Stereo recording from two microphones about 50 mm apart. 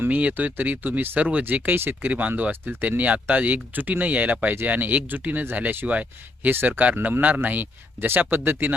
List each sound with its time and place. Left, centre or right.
0.0 s speech: right
6.5 s speech: right